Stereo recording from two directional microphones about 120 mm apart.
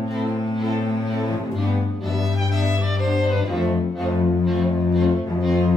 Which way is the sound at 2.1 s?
Centre (ahead or behind).